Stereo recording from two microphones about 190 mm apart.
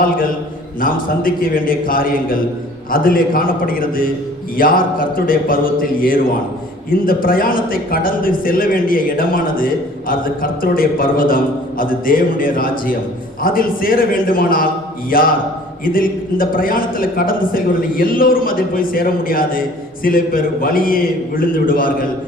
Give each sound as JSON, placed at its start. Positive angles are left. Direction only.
{"t": 0.8, "sound": "a man's voice", "side_deg": 50}